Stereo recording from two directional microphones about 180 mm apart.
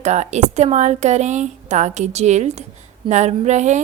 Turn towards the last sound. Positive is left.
turn(degrees=-40)  # may be behind; listen again after turning